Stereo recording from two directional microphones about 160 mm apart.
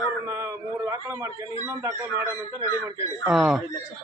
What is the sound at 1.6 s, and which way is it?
Speech, 15° right (ahead or behind).